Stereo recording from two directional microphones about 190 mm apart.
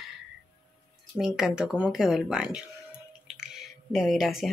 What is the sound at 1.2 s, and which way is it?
Speech, 5° right (ahead or behind).